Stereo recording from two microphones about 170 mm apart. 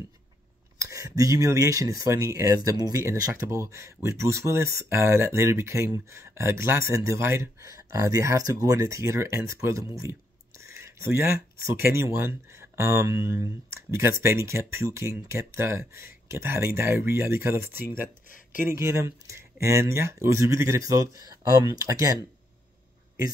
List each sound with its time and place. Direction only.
0.7 s speech: 20° right (ahead or behind)
18.0 s a sound: 50° left (ahead or behind)
18.8 s speech: 15° right (ahead or behind)